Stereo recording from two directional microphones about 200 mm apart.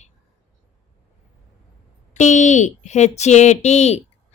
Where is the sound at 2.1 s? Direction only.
35° left (ahead or behind).